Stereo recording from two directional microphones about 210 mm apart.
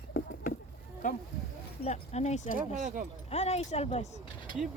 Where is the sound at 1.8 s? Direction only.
30° left (ahead or behind).